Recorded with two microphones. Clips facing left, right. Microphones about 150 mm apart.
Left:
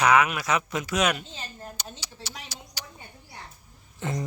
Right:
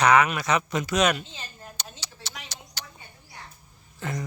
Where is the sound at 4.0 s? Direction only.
25° left (ahead or behind).